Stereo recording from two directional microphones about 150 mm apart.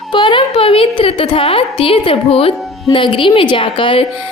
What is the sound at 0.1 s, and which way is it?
A woman's voice, 35° left (ahead or behind).